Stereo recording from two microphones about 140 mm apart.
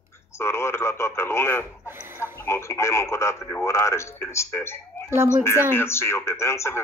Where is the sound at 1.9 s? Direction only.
15° right (ahead or behind).